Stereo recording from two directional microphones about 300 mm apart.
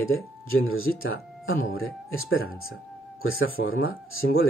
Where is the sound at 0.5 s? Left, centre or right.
Left.